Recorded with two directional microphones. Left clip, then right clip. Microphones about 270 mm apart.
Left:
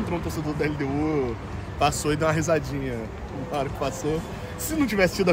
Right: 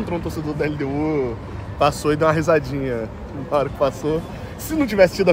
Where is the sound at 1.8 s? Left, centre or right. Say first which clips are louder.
Right 5 dB; centre.